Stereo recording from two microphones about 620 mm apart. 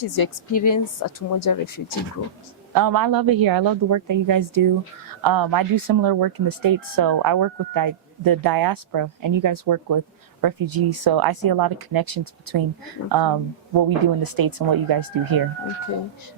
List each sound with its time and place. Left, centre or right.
0.0 s speech: left
2.7 s speech: right